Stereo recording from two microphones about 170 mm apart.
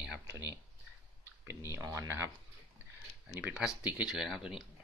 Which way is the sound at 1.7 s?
20° right (ahead or behind).